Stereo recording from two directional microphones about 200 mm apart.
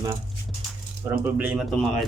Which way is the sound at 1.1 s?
10° right (ahead or behind).